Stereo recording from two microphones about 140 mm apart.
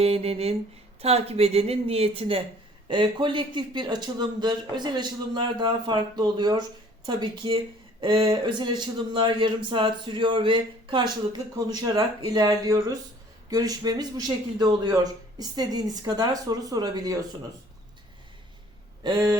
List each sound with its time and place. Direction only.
0.0 s a woman's voice: 45° right (ahead or behind); by 17.2 s 25° right (ahead or behind)
19.0 s speech: 30° right (ahead or behind)